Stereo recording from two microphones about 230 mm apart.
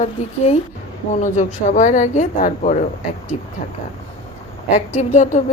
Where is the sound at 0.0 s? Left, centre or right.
Left.